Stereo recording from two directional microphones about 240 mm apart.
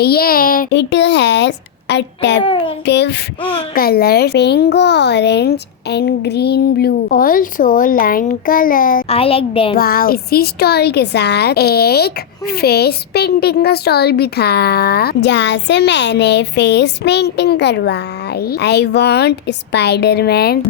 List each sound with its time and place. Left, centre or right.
0.0 s speech: left
2.4 s a child's voice: left
2.8 s speech: left
9.7 s speech: left